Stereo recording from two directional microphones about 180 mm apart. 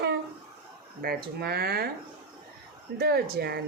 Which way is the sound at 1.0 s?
60° right (ahead or behind).